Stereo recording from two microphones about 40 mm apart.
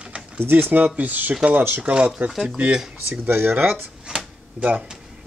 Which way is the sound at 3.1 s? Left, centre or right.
Right.